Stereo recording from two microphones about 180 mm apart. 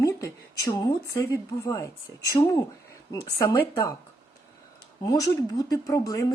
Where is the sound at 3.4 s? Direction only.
15° left (ahead or behind).